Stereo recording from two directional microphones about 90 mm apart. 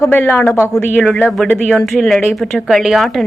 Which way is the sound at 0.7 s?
5° left (ahead or behind).